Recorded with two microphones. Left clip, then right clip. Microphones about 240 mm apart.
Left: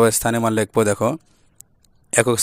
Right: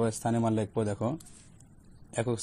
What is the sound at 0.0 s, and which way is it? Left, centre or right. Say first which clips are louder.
Speech: left 12 dB; left.